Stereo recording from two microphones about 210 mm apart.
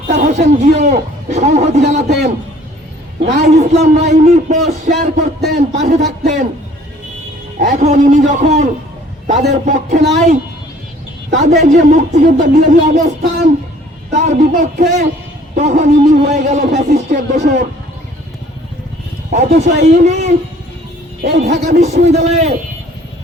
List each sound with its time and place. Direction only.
0.1 s a man's voice: 35° right (ahead or behind)
3.3 s a man's voice: 35° right (ahead or behind)
7.6 s a man's voice: 35° right (ahead or behind)
11.3 s a man's voice: 35° right (ahead or behind)
19.3 s a man's voice: 35° right (ahead or behind)
21.2 s a man's voice: 35° right (ahead or behind)